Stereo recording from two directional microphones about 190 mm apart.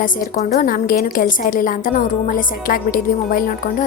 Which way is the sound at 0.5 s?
45° left (ahead or behind).